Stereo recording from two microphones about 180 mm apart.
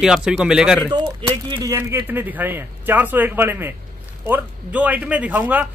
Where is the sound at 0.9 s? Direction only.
20° right (ahead or behind).